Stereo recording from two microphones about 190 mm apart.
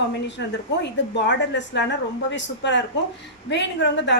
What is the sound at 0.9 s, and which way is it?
A woman's voice, 70° left (ahead or behind).